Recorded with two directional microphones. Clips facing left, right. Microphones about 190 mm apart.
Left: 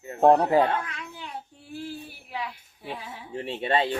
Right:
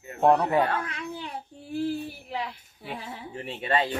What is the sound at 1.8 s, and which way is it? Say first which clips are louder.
Speech: right 8 dB; 40° right (ahead or behind).